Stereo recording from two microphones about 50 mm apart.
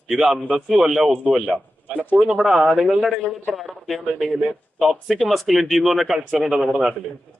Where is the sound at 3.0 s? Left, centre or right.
Centre.